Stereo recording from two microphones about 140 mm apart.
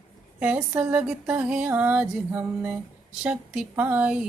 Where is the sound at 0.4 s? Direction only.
10° right (ahead or behind).